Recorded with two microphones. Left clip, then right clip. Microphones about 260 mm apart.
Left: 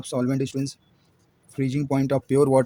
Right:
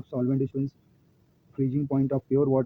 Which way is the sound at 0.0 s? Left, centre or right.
Centre.